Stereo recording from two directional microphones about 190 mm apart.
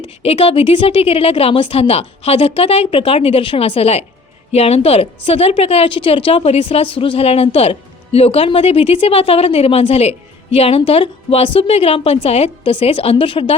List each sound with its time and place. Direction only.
0.2 s a woman's voice: 30° left (ahead or behind)